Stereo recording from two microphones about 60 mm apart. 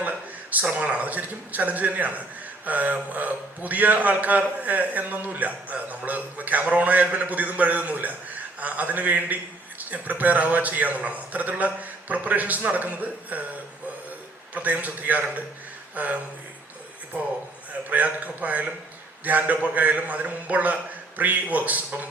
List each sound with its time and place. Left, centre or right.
0.0 s a sound: right
0.6 s a man's voice: right
14.5 s a man's voice: right
17.8 s a man's voice: right